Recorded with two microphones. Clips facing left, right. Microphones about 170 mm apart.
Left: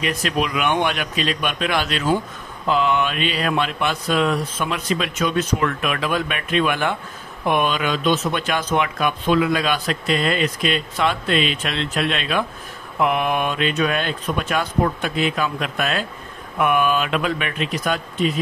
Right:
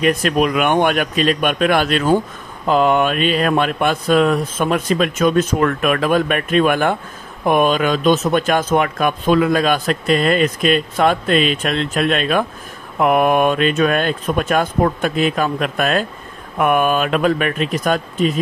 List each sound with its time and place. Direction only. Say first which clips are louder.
0.0 s speech: right 7 dB; 50° right (ahead or behind)